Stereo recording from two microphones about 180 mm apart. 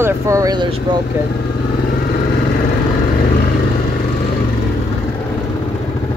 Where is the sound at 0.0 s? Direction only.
15° right (ahead or behind).